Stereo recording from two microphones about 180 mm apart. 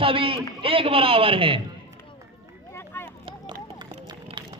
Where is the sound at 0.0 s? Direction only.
30° right (ahead or behind).